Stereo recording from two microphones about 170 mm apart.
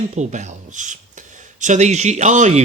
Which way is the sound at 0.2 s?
45° right (ahead or behind).